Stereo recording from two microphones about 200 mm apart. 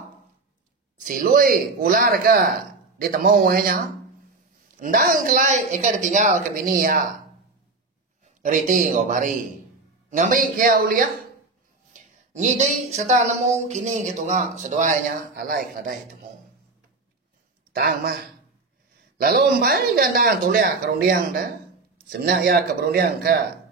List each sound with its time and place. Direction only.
0.9 s speech: 45° right (ahead or behind)
8.4 s speech: 40° right (ahead or behind)
17.7 s speech: 50° right (ahead or behind)